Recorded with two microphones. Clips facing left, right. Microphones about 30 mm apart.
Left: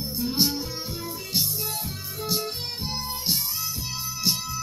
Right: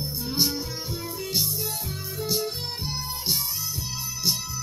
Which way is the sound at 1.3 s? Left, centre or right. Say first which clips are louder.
Left 1 dB; left.